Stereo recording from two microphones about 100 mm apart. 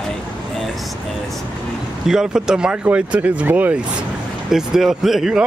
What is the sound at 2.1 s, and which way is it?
Speech, 5° right (ahead or behind).